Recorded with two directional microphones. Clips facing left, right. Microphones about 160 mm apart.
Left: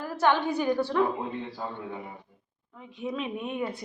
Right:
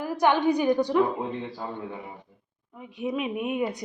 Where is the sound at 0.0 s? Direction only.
15° right (ahead or behind).